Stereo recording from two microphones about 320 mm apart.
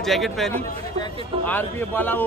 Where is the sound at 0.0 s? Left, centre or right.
Centre.